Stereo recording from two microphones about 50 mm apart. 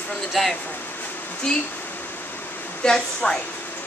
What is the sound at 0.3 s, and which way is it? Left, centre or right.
A woman's voice, centre.